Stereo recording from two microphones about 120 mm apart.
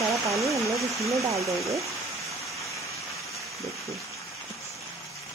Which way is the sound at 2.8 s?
25° left (ahead or behind).